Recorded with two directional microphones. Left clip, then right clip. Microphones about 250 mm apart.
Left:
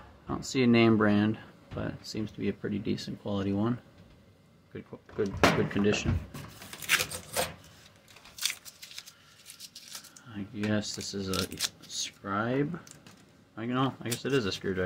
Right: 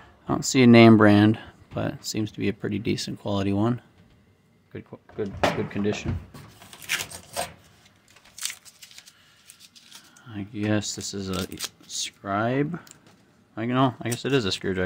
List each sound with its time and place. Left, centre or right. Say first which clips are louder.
0.3 s speech: right 9 dB; right
4.9 s speech: even; right
10.2 s speech: right 6 dB; right